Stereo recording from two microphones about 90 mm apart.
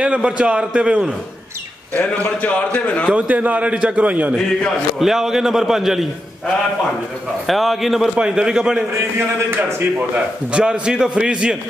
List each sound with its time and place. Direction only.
0.0 s a man's voice: 15° right (ahead or behind)
2.0 s a man's voice: 15° left (ahead or behind)
3.1 s a man's voice: 15° right (ahead or behind)
4.6 s a man's voice: centre (ahead or behind)
7.4 s a man's voice: centre (ahead or behind)
9.5 s a man's voice: 25° right (ahead or behind)